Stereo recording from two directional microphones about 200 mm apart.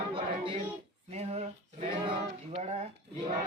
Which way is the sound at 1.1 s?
30° right (ahead or behind).